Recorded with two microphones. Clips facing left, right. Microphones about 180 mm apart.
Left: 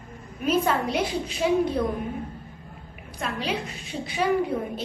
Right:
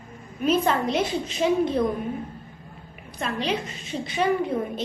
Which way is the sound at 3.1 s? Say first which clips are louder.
Right 2 dB; 10° left (ahead or behind).